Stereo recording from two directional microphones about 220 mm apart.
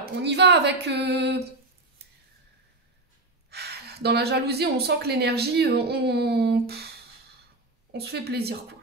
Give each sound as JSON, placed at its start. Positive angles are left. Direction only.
{"t": 0.0, "sound": "a woman's voice", "side_deg": -50}
{"t": 3.4, "sound": "a woman's voice", "side_deg": -45}
{"t": 7.9, "sound": "a woman's voice", "side_deg": -45}